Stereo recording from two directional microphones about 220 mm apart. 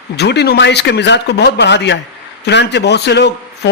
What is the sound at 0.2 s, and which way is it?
A man's voice, 50° left (ahead or behind).